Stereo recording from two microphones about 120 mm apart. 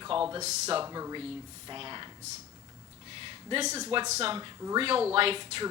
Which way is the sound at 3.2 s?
45° right (ahead or behind).